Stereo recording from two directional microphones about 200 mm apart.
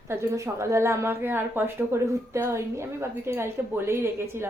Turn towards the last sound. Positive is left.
turn(degrees=-10)  # may be behind; listen again after turning